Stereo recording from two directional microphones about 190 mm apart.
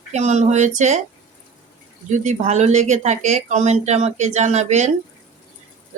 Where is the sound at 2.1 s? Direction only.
35° right (ahead or behind).